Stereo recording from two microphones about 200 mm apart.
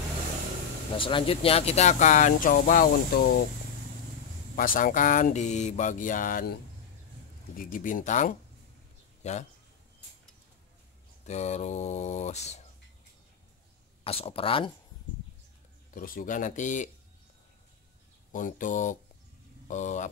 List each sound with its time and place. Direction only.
0.9 s speech: 25° left (ahead or behind); by 3.3 s 50° left (ahead or behind)
4.6 s speech: 45° left (ahead or behind)
7.5 s speech: 45° left (ahead or behind)
11.2 s speech: 35° left (ahead or behind)
14.0 s speech: 30° left (ahead or behind)
15.9 s speech: 45° left (ahead or behind)
18.3 s speech: 40° left (ahead or behind)